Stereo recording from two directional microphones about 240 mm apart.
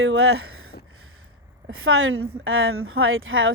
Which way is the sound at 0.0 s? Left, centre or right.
Right.